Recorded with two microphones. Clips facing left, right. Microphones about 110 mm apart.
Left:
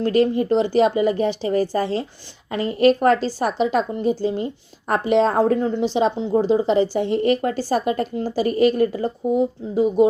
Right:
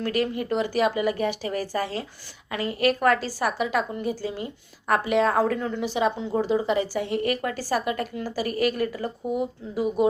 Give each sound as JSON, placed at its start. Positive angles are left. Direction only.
{"t": 0.0, "sound": "a woman's voice", "side_deg": 30}